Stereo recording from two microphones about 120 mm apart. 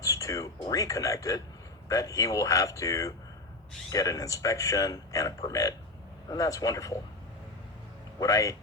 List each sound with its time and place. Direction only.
0.0 s a sound: 30° left (ahead or behind)
0.7 s a man's voice: 30° left (ahead or behind)
8.2 s a man's voice: 25° left (ahead or behind)